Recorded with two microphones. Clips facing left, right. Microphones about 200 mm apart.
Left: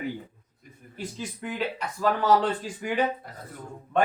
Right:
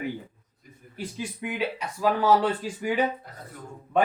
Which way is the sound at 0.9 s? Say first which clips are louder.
Right 1 dB; 10° right (ahead or behind).